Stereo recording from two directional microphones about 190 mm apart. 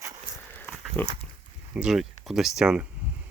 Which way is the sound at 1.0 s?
10° left (ahead or behind).